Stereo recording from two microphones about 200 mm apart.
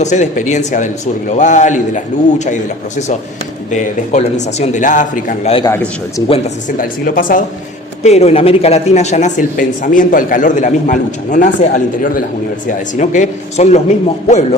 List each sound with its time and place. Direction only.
0.0 s speech: 35° left (ahead or behind)
5.6 s a man's voice: 15° left (ahead or behind)
6.2 s speech: 30° left (ahead or behind)
6.7 s a woman's voice: 45° left (ahead or behind)
8.0 s speech: 30° left (ahead or behind)